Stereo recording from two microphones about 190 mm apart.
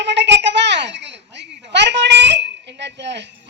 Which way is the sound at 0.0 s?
65° right (ahead or behind).